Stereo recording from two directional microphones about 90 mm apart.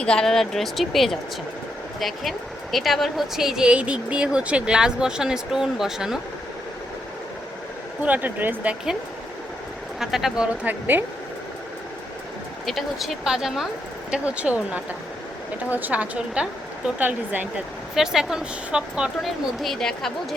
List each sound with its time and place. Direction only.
0.0 s speech: 10° left (ahead or behind)
8.0 s speech: 20° right (ahead or behind)
10.0 s speech: 5° right (ahead or behind); by 11.0 s 20° right (ahead or behind)
12.6 s speech: centre (ahead or behind); by 17.5 s 20° right (ahead or behind)
17.9 s speech: 5° right (ahead or behind)
19.6 s speech: 5° left (ahead or behind)